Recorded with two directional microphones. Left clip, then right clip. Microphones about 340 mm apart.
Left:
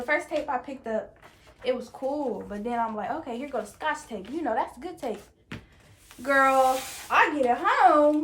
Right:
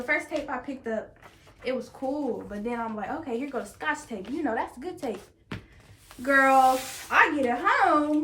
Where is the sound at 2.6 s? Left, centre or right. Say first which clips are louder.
Left 4 dB; centre.